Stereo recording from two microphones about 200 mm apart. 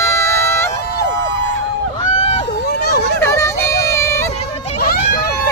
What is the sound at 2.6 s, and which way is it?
Vehicle, 55° left (ahead or behind).